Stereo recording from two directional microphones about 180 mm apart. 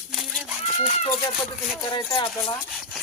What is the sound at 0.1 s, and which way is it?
Chicken, 5° right (ahead or behind).